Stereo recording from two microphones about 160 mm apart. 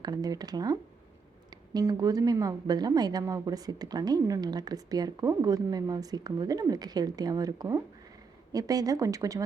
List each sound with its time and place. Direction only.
0.0 s a woman's voice: 25° right (ahead or behind)